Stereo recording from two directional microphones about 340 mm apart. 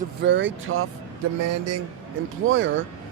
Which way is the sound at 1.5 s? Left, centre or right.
Right.